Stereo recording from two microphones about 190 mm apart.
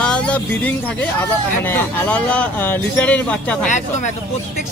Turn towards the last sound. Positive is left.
turn(degrees=5)  # may be behind; listen again after turning